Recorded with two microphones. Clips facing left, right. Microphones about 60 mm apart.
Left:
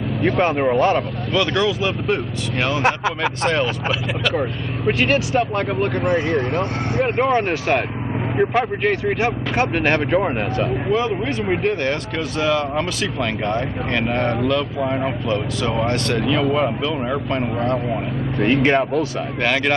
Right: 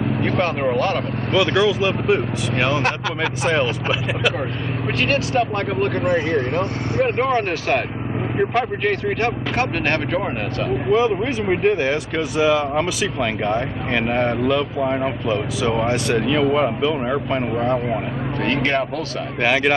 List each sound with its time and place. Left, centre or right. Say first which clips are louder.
0.7 s speech: left 3 dB; centre
1.3 s speech: right 2 dB; centre
18.4 s speech: left 4 dB; centre
19.4 s speech: right 2 dB; centre